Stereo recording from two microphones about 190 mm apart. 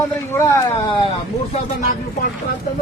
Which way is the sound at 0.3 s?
15° left (ahead or behind).